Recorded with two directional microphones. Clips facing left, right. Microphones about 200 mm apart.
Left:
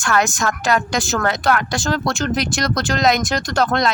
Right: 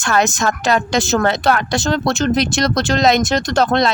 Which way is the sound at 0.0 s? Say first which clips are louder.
Right 2 dB; 25° right (ahead or behind).